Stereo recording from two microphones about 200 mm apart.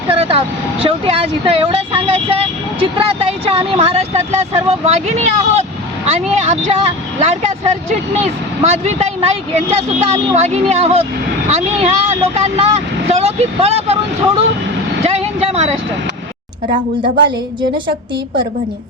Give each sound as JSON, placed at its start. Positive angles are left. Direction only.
{"t": 0.1, "sound": "speech", "side_deg": -30}